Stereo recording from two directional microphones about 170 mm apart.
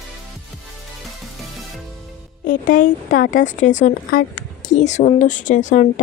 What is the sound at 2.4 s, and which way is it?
A woman's voice, 55° left (ahead or behind).